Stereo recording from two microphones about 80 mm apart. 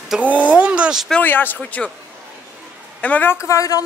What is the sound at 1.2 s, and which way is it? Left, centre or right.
Speech, left.